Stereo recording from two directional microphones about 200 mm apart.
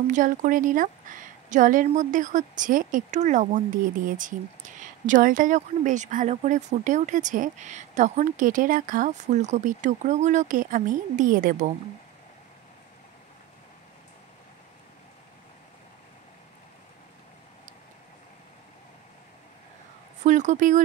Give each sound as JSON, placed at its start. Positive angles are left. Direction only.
{"t": 0.1, "sound": "a woman's voice", "side_deg": -40}
{"t": 20.2, "sound": "a woman's voice", "side_deg": -35}